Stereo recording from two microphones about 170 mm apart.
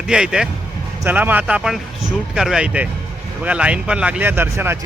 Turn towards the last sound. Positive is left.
turn(degrees=-15)  # may be behind; listen again after turning